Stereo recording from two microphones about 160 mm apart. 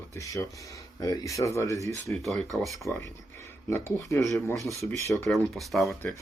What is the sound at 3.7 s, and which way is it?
Speech, 20° left (ahead or behind).